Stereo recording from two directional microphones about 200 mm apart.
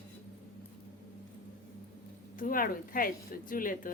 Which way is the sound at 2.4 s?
45° left (ahead or behind).